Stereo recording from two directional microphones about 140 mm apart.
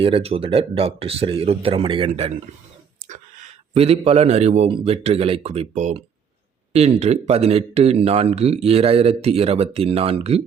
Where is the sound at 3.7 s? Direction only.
45° right (ahead or behind).